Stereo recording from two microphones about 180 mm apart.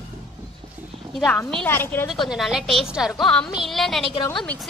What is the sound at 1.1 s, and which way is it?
Speech, 5° left (ahead or behind).